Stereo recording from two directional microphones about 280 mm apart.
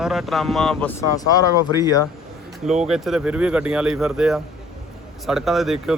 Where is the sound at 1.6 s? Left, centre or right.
Centre.